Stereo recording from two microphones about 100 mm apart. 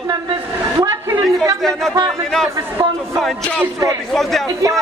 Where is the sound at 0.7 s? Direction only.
40° right (ahead or behind).